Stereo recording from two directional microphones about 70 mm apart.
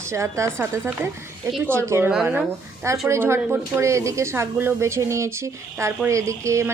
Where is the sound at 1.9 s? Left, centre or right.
Right.